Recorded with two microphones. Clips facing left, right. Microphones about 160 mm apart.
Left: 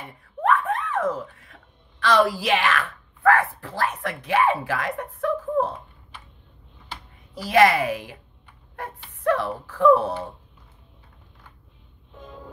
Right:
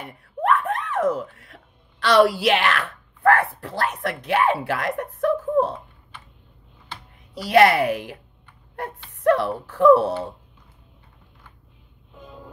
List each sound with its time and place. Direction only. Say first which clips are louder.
0.0 s a sound: even; 70° right (ahead or behind)
7.4 s a woman's voice: right 2 dB; 65° right (ahead or behind)
9.2 s speech: right 4 dB; 65° right (ahead or behind)
12.2 s vehicle: left 1 dB; 5° right (ahead or behind)